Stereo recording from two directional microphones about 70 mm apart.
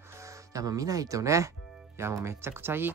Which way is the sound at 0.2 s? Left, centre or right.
Right.